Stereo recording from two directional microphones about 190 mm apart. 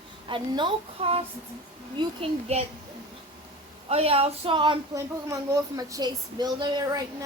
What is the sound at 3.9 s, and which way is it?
Speech, 30° right (ahead or behind).